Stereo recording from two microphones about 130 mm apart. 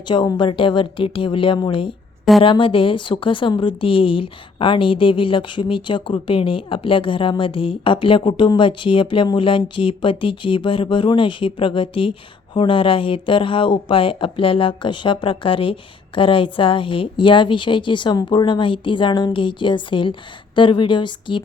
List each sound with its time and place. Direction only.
0.1 s a woman's voice: 35° left (ahead or behind)